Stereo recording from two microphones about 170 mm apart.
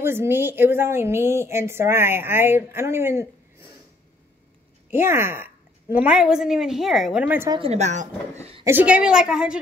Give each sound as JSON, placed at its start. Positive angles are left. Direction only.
{"t": 0.0, "sound": "a woman's voice", "side_deg": -15}
{"t": 4.9, "sound": "a woman's voice", "side_deg": -15}
{"t": 7.4, "sound": "a woman's voice", "side_deg": -25}
{"t": 7.7, "sound": "speech", "side_deg": -45}
{"t": 8.6, "sound": "a woman's voice", "side_deg": -10}